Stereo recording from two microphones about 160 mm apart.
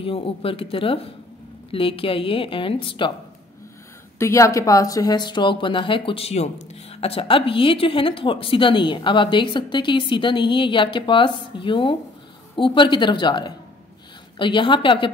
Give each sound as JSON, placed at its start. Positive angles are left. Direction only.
{"t": 0.0, "sound": "speech", "side_deg": 35}
{"t": 4.2, "sound": "speech", "side_deg": 20}